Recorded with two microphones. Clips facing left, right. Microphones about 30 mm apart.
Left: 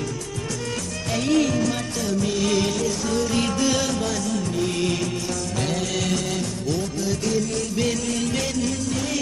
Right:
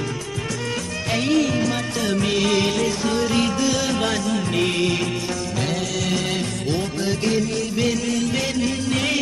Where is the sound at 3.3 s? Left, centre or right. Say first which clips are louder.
Right 1 dB; centre.